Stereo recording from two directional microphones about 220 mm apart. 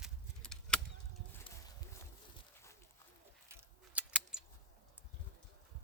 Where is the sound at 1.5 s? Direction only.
25° left (ahead or behind).